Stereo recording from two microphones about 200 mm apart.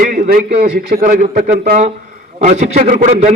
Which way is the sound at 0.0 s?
50° right (ahead or behind).